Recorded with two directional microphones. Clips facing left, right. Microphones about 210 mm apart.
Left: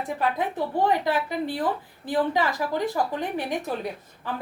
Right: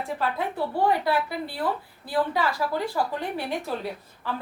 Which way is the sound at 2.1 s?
20° left (ahead or behind).